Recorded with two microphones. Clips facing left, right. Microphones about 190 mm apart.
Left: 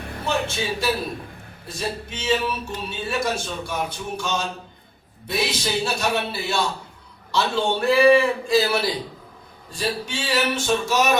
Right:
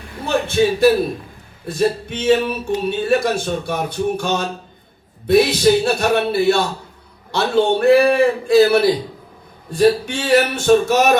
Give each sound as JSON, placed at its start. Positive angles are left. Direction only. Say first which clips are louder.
{"t": 0.3, "sound": "a man's voice", "louder": "right 9 dB", "side_deg": -55}